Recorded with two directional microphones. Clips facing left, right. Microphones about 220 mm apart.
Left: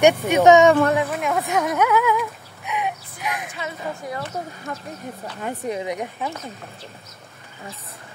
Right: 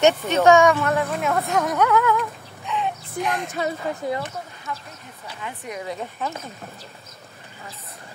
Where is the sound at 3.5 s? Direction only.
40° right (ahead or behind).